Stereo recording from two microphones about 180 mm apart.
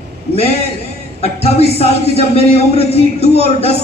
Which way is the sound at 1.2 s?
35° left (ahead or behind).